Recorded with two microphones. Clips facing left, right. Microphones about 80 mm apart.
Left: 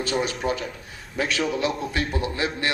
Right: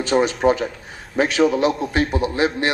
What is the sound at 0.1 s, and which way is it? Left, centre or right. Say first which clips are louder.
Speech: right 9 dB; right.